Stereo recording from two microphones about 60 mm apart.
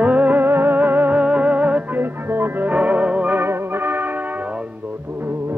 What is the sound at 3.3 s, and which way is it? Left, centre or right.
Music, right.